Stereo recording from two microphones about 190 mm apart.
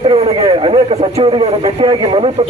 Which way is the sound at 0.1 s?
25° right (ahead or behind).